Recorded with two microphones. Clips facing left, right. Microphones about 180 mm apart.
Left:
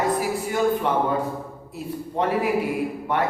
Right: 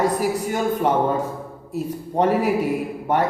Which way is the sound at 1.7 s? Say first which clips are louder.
Right 5 dB; 40° right (ahead or behind).